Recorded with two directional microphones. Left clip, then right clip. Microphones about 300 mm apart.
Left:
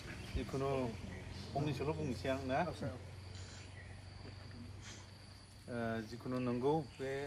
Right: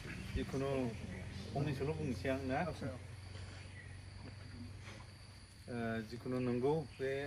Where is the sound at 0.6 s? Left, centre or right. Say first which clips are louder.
Left 1 dB; centre.